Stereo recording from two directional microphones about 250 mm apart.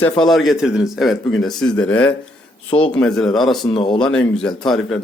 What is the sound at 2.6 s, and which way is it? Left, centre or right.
Speech, left.